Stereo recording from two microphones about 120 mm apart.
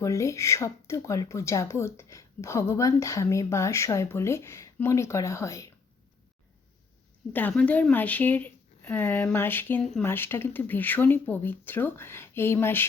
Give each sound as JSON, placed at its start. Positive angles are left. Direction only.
{"t": 0.0, "sound": "speech", "side_deg": 25}
{"t": 7.5, "sound": "speech", "side_deg": 10}